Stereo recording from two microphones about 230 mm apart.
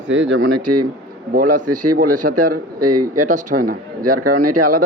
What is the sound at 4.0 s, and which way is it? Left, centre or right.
Speech, right.